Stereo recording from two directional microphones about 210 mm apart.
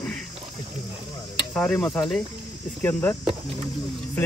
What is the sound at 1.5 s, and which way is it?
Speech, 5° left (ahead or behind).